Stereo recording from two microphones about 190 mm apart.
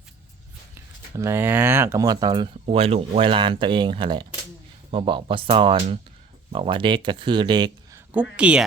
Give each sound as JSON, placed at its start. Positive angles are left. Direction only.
{"t": 1.1, "sound": "speech", "side_deg": -15}
{"t": 2.6, "sound": "speech", "side_deg": -30}
{"t": 8.1, "sound": "speech", "side_deg": -5}